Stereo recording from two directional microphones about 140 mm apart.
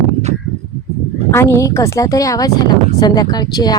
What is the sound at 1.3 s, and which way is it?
A woman's voice, 20° left (ahead or behind).